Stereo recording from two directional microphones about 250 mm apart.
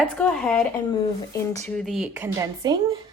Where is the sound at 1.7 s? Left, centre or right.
Centre.